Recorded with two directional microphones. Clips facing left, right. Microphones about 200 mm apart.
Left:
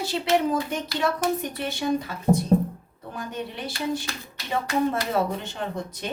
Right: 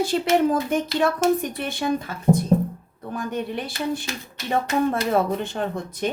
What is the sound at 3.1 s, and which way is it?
Speech, 55° right (ahead or behind).